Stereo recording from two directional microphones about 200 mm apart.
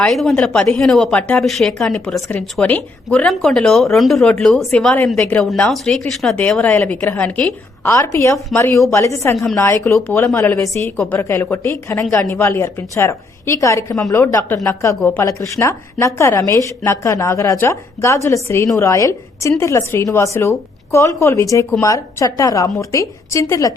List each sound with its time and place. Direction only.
0.0 s speech: centre (ahead or behind)
2.1 s speech: 15° left (ahead or behind)
8.5 s speech: centre (ahead or behind)
8.9 s speech: 15° left (ahead or behind)
9.9 s speech: centre (ahead or behind)
10.9 s speech: centre (ahead or behind)
11.2 s speech: 10° left (ahead or behind)